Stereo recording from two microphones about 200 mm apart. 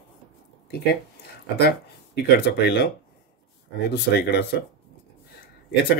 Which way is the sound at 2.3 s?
60° left (ahead or behind).